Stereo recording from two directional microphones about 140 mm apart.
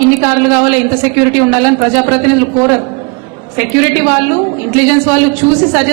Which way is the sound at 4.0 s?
15° right (ahead or behind).